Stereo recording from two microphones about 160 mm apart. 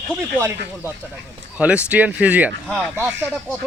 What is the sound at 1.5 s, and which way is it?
Speech, 10° right (ahead or behind).